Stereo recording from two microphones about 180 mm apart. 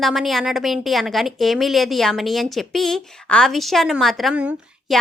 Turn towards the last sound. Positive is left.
turn(degrees=-5)  # may be behind; listen again after turning